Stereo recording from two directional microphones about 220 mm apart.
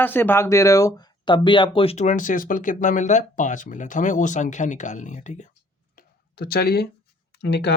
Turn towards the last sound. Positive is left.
turn(degrees=50)  # may be behind; listen again after turning